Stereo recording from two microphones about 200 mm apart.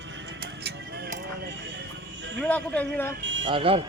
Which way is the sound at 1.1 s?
55° right (ahead or behind).